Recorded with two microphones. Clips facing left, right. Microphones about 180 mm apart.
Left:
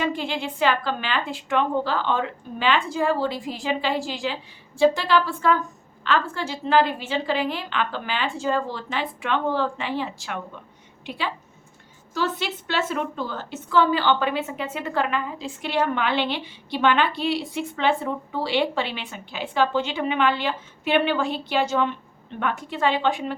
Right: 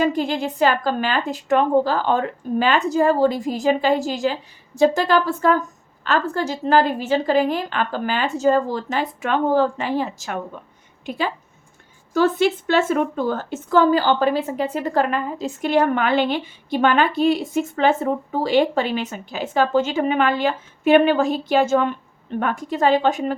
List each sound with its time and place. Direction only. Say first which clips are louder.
0.0 s a woman's voice: right 6 dB; 40° right (ahead or behind)